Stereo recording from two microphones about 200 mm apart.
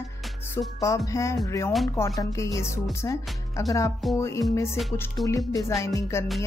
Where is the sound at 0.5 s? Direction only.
15° left (ahead or behind).